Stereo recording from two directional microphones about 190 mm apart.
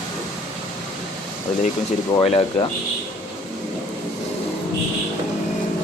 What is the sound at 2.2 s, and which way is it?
Speech, 30° left (ahead or behind).